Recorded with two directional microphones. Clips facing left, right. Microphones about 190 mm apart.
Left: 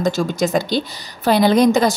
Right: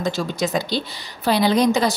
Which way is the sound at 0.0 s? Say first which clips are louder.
Left 4 dB; 50° left (ahead or behind).